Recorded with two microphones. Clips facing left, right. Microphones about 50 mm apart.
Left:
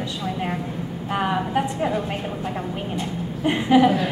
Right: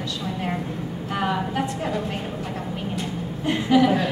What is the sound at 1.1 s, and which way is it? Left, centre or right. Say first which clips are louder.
Speech: left 2 dB; centre.